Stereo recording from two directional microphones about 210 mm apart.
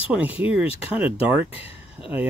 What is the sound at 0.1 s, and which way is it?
Speech, 5° right (ahead or behind).